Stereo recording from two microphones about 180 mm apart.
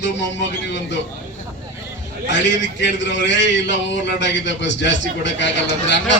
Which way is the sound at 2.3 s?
80° left.